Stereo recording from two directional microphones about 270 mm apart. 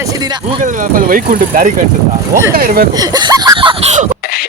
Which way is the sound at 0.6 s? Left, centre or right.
Right.